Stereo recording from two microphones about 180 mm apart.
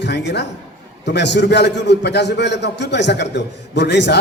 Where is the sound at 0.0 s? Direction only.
70° left (ahead or behind).